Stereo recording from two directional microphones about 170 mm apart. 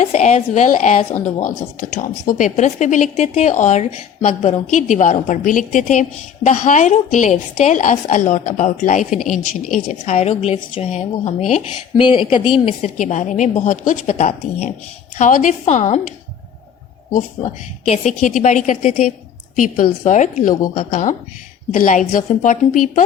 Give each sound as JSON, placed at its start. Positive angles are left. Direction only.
{"t": 0.0, "sound": "a woman's voice", "side_deg": 40}
{"t": 11.9, "sound": "a woman's voice", "side_deg": 30}
{"t": 13.0, "sound": "a woman's voice", "side_deg": 45}
{"t": 17.4, "sound": "a woman's voice", "side_deg": 40}
{"t": 19.5, "sound": "a woman's voice", "side_deg": 50}